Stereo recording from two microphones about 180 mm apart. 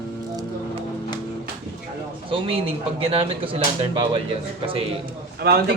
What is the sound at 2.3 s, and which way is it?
Speech, 30° right (ahead or behind).